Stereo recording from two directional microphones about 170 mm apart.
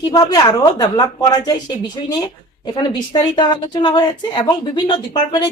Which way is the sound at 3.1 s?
25° left (ahead or behind).